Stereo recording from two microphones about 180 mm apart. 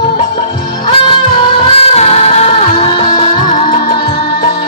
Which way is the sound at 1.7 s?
35° left (ahead or behind).